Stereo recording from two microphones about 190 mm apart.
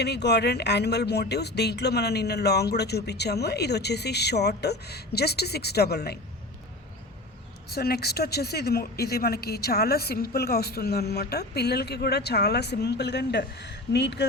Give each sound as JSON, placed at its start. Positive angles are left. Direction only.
{"t": 0.0, "sound": "speech", "side_deg": 60}
{"t": 7.7, "sound": "speech", "side_deg": 55}